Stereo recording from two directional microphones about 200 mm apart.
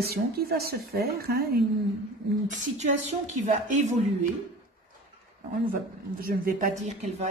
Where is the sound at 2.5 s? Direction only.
35° right (ahead or behind).